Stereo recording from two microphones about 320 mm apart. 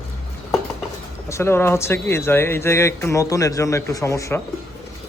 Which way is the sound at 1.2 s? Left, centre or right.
Centre.